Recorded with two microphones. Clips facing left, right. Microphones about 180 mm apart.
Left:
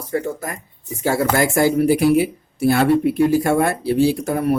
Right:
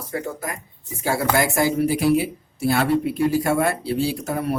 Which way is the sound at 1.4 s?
55° left (ahead or behind).